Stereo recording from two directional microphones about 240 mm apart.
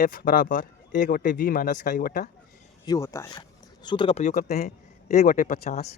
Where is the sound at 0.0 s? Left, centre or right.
Left.